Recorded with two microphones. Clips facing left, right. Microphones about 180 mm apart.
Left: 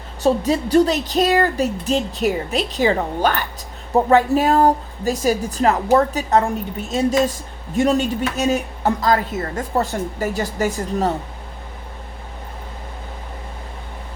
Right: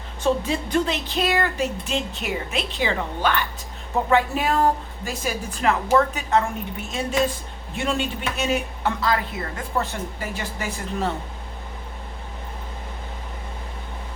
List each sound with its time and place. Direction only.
0.2 s a woman's voice: 40° left (ahead or behind)
7.8 s a woman's voice: 40° left (ahead or behind)